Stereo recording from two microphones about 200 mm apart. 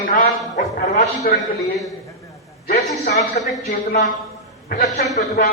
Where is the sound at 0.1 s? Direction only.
40° left (ahead or behind).